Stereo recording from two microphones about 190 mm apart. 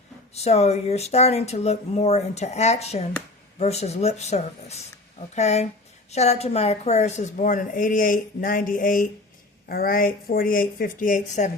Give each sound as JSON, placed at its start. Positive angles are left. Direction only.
{"t": 0.3, "sound": "a woman's voice", "side_deg": 35}